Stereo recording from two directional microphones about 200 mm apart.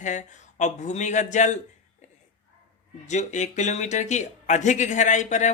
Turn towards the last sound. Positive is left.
turn(degrees=35)  # may be behind; listen again after turning